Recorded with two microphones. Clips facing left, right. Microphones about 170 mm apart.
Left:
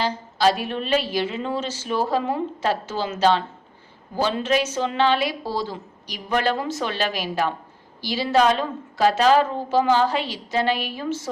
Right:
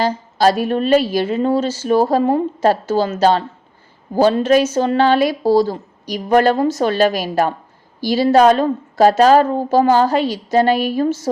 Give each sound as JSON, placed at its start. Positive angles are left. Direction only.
{"t": 0.0, "sound": "speech", "side_deg": -45}